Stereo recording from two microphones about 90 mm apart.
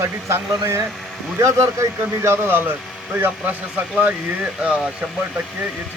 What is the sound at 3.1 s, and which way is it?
Speech, 15° right (ahead or behind).